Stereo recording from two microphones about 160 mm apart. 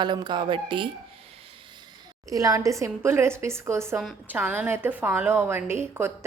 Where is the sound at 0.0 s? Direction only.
30° right (ahead or behind).